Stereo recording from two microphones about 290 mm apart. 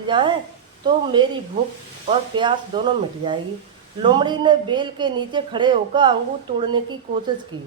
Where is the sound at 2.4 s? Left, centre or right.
Centre.